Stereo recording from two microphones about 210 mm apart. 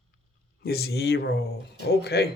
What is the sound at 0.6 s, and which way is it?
Speech, 50° left (ahead or behind).